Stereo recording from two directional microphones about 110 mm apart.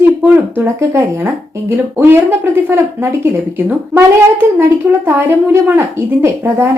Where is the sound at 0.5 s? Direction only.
20° right (ahead or behind).